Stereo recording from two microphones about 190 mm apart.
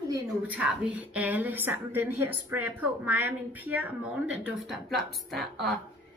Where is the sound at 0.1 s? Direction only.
10° right (ahead or behind).